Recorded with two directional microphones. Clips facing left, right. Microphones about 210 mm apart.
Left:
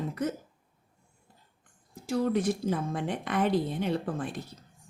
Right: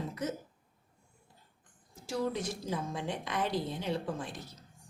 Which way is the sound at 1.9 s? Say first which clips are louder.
Left 6 dB; 55° left (ahead or behind).